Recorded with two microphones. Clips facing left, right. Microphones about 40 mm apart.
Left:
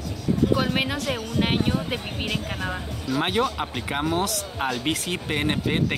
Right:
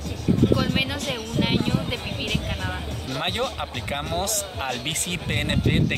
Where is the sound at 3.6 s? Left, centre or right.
Centre.